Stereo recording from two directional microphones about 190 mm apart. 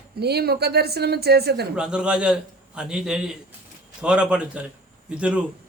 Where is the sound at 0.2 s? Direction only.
60° right (ahead or behind).